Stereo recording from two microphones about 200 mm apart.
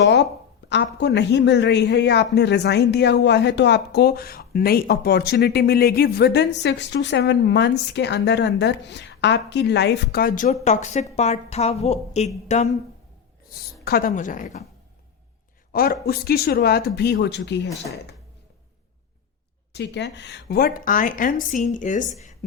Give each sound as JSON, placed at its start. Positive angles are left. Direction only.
{"t": 0.0, "sound": "a sound", "side_deg": 60}
{"t": 0.7, "sound": "a woman's voice", "side_deg": 60}
{"t": 13.8, "sound": "a woman's voice", "side_deg": 50}
{"t": 15.7, "sound": "a woman's voice", "side_deg": 50}
{"t": 19.7, "sound": "a woman's voice", "side_deg": 60}